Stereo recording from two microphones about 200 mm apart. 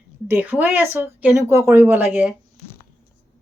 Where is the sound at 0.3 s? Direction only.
10° right (ahead or behind).